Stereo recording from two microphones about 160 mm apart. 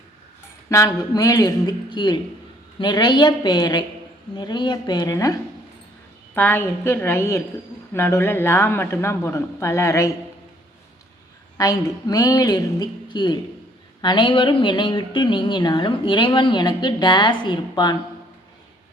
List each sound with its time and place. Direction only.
0.7 s speech: 20° left (ahead or behind)
6.3 s speech: 10° left (ahead or behind)
11.5 s speech: 20° left (ahead or behind)